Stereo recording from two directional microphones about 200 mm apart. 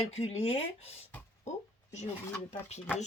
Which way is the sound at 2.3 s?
10° left (ahead or behind).